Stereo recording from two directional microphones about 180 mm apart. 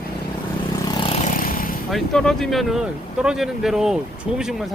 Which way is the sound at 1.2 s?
50° left (ahead or behind).